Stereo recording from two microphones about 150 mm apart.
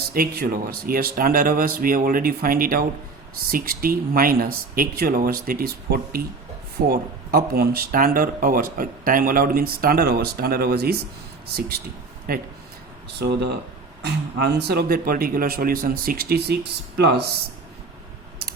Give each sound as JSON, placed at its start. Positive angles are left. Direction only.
{"t": 0.1, "sound": "speech", "side_deg": -85}
{"t": 12.3, "sound": "speech", "side_deg": -75}
{"t": 13.1, "sound": "speech", "side_deg": -90}